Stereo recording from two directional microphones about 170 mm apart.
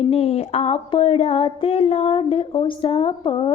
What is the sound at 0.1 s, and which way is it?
Speech, 35° left (ahead or behind).